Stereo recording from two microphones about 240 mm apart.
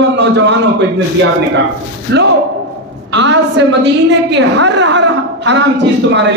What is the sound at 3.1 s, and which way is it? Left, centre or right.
Speech, right.